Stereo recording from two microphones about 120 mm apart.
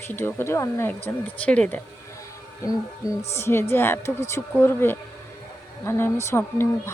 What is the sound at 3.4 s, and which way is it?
A woman's voice, 20° left (ahead or behind).